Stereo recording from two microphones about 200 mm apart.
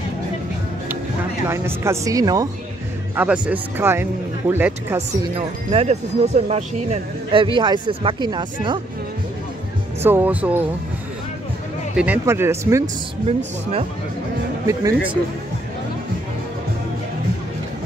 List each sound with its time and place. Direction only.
1.5 s speech: 15° right (ahead or behind)
3.2 s speech: 5° right (ahead or behind)
5.3 s speech: 30° right (ahead or behind)
10.0 s speech: 10° right (ahead or behind)
12.0 s speech: 10° right (ahead or behind)
14.7 s speech: 15° right (ahead or behind)